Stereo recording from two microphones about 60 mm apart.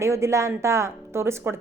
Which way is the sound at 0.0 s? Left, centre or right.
Right.